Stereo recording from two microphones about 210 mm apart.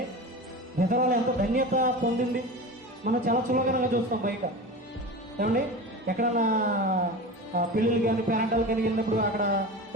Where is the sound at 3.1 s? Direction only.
40° right (ahead or behind).